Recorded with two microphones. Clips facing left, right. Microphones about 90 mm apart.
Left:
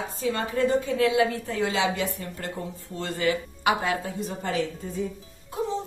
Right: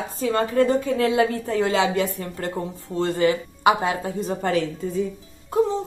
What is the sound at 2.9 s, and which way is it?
A woman's voice, 35° right (ahead or behind).